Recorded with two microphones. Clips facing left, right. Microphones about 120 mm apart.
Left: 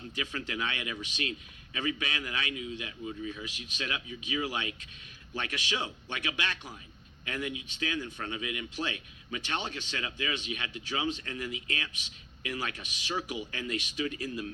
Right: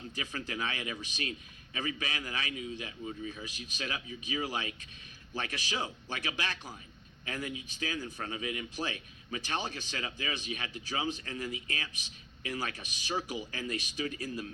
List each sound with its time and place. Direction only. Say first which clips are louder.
0.2 s a man's voice: left 2 dB; 30° right (ahead or behind)